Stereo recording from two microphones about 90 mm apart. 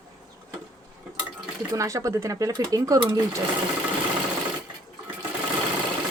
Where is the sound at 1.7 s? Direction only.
35° right (ahead or behind).